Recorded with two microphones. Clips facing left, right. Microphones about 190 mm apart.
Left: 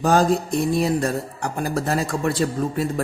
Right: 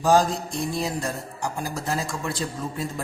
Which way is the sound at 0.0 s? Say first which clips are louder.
Left 2 dB; 60° left (ahead or behind).